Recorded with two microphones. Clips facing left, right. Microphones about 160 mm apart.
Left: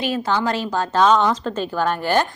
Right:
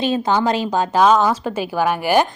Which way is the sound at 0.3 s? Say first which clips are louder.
Right 3 dB; 15° right (ahead or behind).